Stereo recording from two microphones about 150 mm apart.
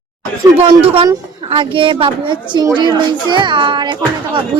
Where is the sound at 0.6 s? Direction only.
40° right (ahead or behind).